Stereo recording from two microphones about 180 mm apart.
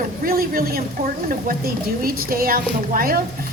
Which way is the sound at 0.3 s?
55° right (ahead or behind).